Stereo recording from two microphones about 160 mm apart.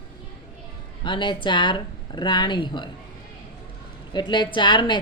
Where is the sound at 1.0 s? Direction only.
30° left (ahead or behind).